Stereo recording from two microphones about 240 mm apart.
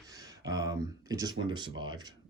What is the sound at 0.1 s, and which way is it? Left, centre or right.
Speech, centre.